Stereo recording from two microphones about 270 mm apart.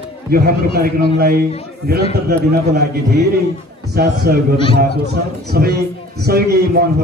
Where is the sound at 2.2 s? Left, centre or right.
Right.